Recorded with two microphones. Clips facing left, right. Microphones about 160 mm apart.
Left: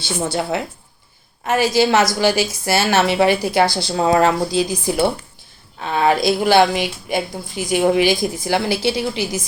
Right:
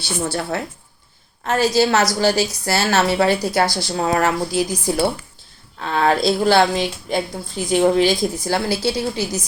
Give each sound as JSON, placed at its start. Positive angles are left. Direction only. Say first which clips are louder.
{"t": 0.3, "sound": "a woman's voice", "louder": "left 4 dB", "side_deg": 20}